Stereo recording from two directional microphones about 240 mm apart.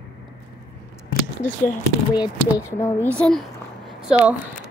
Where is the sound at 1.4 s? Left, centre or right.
Left.